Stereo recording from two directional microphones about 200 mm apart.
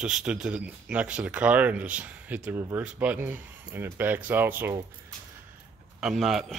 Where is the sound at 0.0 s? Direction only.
5° right (ahead or behind).